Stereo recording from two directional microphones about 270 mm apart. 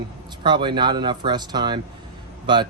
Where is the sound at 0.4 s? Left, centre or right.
Centre.